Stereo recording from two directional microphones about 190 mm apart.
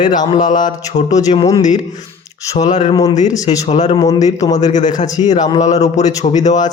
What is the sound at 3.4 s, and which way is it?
Speech, 40° left (ahead or behind).